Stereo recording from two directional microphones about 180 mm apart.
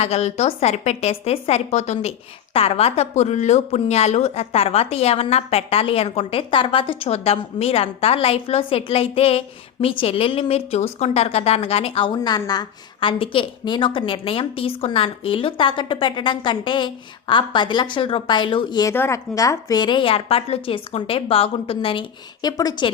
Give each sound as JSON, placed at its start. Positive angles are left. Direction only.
{"t": 0.0, "sound": "a woman's voice", "side_deg": 35}